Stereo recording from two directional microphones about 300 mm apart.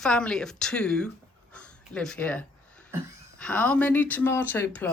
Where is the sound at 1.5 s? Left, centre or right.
Centre.